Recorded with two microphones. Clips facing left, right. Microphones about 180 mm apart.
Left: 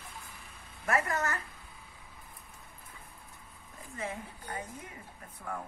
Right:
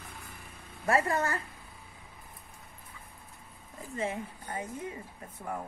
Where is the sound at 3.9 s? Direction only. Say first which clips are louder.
Right 5 dB; 30° right (ahead or behind).